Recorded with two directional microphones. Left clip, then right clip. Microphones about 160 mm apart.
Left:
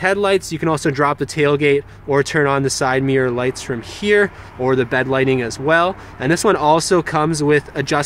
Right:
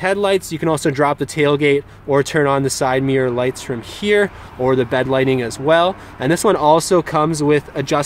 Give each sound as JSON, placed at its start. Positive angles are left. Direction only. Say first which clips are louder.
{"t": 0.0, "sound": "speech", "louder": "even", "side_deg": -15}